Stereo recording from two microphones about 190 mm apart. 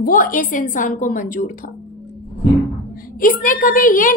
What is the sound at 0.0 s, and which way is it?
A woman's voice, 45° left (ahead or behind).